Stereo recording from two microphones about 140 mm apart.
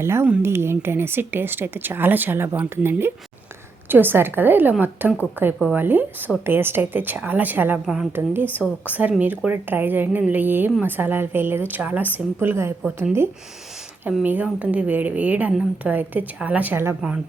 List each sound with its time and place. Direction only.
0.0 s speech: 15° right (ahead or behind)
14.1 s speech: 10° right (ahead or behind)